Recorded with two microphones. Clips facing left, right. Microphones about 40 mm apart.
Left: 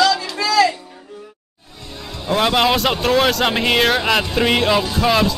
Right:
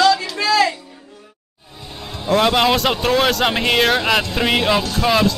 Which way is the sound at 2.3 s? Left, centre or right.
Centre.